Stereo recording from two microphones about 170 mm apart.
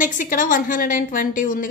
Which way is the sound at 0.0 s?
50° left (ahead or behind).